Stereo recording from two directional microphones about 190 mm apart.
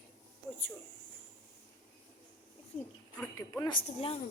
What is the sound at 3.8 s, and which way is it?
Speech, 30° left (ahead or behind).